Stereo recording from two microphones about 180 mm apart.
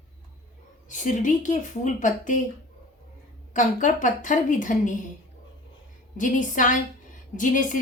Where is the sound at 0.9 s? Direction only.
45° left (ahead or behind).